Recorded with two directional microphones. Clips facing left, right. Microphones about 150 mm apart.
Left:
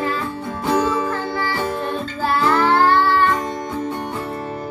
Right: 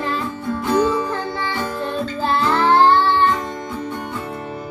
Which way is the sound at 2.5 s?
25° right (ahead or behind).